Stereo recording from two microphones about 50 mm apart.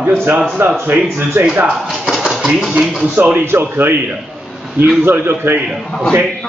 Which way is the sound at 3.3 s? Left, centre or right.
Right.